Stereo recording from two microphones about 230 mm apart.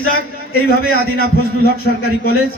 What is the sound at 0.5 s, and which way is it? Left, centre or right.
A man's voice, left.